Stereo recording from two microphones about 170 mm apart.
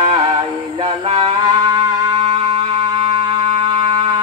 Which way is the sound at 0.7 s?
35° right (ahead or behind).